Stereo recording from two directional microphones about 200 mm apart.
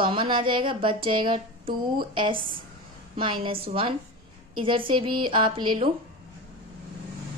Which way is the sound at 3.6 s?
25° right (ahead or behind).